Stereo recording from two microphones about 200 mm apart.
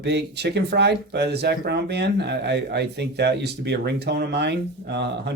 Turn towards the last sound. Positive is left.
turn(degrees=-55)  # may be behind; listen again after turning